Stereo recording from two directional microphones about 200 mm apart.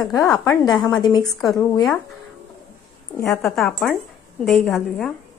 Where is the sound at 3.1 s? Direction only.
15° left (ahead or behind).